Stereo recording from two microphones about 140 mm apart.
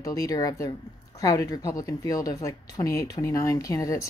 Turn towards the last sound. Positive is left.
turn(degrees=25)  # may be behind; listen again after turning